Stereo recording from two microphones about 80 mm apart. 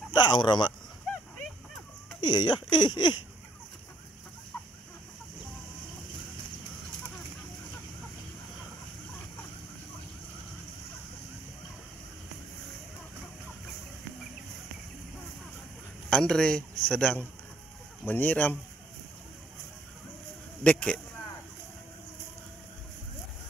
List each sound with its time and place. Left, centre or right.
0.1 s speech: left
2.1 s speech: left
16.1 s a man's voice: centre
18.0 s speech: left
20.6 s a man's voice: centre